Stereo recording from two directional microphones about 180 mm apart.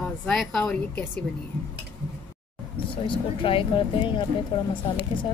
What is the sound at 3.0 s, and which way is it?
Speech, 30° left (ahead or behind).